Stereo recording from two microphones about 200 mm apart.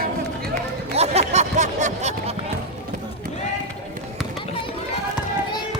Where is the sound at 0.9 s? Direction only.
30° right (ahead or behind).